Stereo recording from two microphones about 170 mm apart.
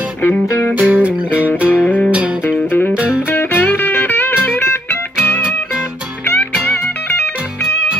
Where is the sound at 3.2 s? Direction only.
10° left (ahead or behind).